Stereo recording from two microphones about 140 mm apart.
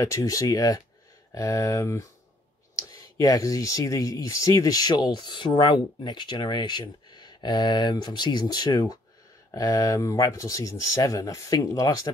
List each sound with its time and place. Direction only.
0.0 s speech: 20° left (ahead or behind)
3.2 s speech: 25° left (ahead or behind)